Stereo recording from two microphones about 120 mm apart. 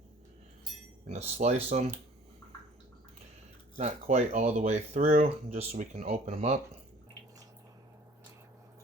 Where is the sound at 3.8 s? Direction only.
65° right (ahead or behind).